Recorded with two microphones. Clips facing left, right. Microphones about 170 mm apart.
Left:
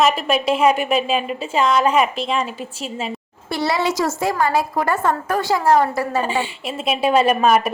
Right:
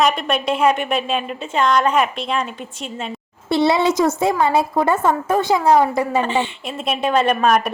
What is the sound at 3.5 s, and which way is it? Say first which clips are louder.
A child's voice: right 4 dB; 20° right (ahead or behind).